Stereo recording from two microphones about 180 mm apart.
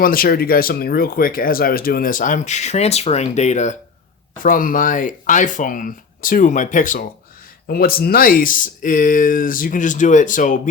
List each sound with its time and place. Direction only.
0.0 s speech: 55° left (ahead or behind)